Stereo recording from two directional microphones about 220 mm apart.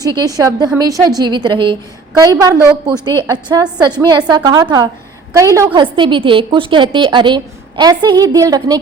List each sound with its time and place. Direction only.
0.0 s a woman's voice: 15° right (ahead or behind)